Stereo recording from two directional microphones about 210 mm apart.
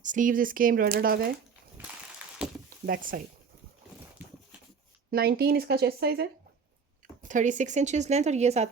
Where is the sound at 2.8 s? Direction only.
40° right (ahead or behind).